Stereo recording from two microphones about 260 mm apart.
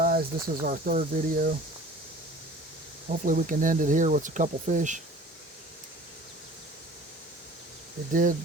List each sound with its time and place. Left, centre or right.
0.0 s cricket: right
0.6 s speech: right
3.1 s speech: right
8.1 s speech: right